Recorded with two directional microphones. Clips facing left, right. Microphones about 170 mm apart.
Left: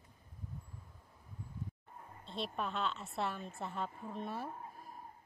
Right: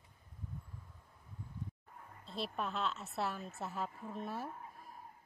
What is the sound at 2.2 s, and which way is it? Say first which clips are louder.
A woman's voice: even; centre (ahead or behind).